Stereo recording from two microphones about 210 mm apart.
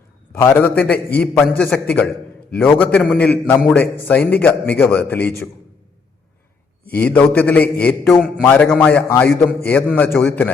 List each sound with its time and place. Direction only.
0.3 s a man's voice: 10° left (ahead or behind)
6.8 s a man's voice: 5° left (ahead or behind)